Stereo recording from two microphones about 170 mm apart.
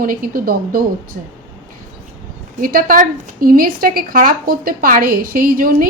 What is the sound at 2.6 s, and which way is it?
A woman's voice, 55° right (ahead or behind).